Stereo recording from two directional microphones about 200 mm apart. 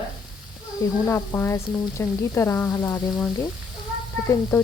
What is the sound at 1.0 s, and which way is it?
Speech, 10° left (ahead or behind).